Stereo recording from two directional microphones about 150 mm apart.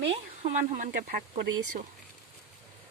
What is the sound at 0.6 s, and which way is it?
Speech, 70° right (ahead or behind).